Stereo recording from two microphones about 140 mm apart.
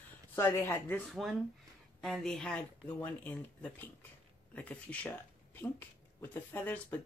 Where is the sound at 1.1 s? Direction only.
Centre (ahead or behind).